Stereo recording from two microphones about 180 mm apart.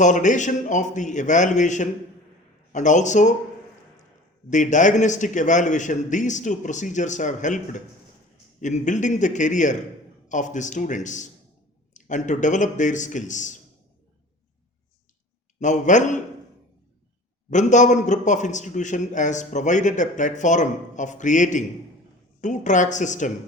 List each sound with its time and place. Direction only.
0.0 s a man's voice: 45° left (ahead or behind)
4.4 s a man's voice: 45° left (ahead or behind)
15.6 s a man's voice: 45° left (ahead or behind)
17.5 s a man's voice: 45° left (ahead or behind)